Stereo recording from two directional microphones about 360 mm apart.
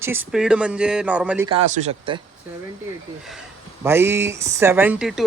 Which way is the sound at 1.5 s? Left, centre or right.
Centre.